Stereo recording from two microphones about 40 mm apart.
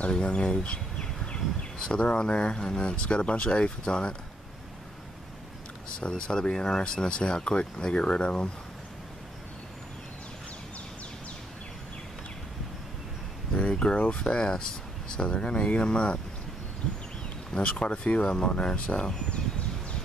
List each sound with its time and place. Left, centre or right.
0.1 s speech: left
5.9 s speech: left
13.6 s speech: left
16.8 s a sound: left
17.5 s speech: left